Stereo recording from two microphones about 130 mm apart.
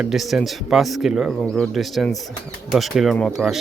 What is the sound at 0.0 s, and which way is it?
Speech, centre (ahead or behind).